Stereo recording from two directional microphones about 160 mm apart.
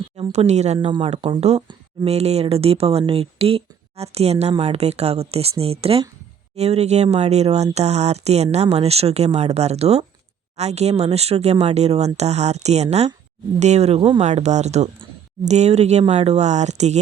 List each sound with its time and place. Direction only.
0.2 s speech: 45° right (ahead or behind)